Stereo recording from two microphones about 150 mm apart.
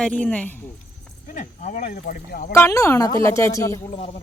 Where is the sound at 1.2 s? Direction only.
60° left (ahead or behind); by 2.5 s 75° left (ahead or behind).